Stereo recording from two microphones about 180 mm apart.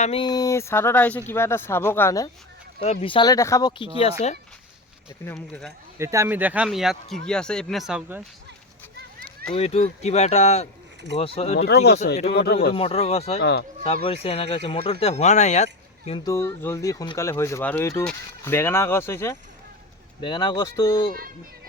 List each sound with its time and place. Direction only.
0.0 s speech: 30° left (ahead or behind)
2.8 s speech: 35° left (ahead or behind)
5.2 s speech: 15° left (ahead or behind)
6.0 s speech: 15° right (ahead or behind)
9.6 s speech: 35° left (ahead or behind)
12.3 s speech: 65° left (ahead or behind)
12.7 s speech: 35° left (ahead or behind)
13.4 s speech: 70° left (ahead or behind)
13.8 s speech: 35° left (ahead or behind)
16.1 s speech: 20° left (ahead or behind)
20.2 s speech: 25° left (ahead or behind)